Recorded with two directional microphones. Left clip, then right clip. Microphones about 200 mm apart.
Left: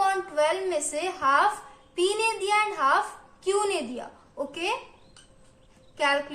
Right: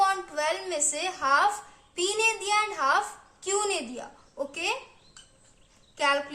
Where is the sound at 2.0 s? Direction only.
15° right (ahead or behind).